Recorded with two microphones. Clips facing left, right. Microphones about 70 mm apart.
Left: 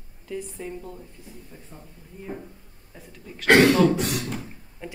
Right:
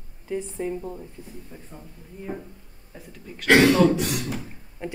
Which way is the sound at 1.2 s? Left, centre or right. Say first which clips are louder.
Right 4 dB; right.